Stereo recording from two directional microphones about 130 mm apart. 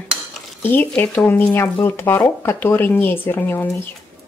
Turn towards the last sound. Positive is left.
turn(degrees=15)  # may be behind; listen again after turning